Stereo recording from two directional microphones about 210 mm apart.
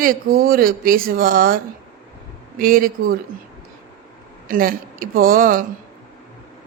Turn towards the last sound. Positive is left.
turn(degrees=-40)  # may be behind; listen again after turning